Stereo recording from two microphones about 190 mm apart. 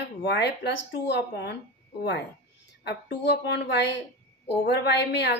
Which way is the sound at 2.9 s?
55° left (ahead or behind).